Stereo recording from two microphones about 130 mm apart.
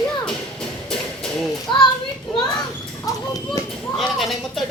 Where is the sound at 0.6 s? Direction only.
5° left (ahead or behind).